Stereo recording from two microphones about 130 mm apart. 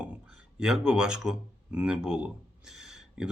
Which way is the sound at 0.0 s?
10° right (ahead or behind).